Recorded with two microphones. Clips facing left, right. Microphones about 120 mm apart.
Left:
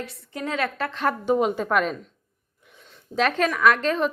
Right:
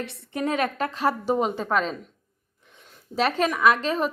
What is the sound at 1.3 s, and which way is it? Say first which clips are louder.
Speech: left 6 dB; centre (ahead or behind).